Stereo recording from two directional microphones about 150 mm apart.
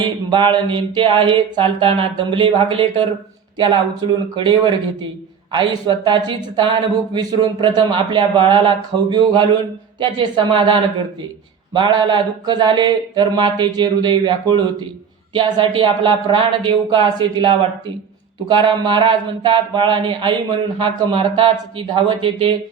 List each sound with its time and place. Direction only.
0.0 s speech: 30° right (ahead or behind)
4.4 s speech: 30° right (ahead or behind)